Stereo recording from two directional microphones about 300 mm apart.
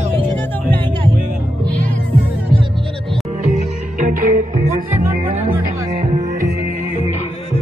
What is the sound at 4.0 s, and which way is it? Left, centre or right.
Music, right.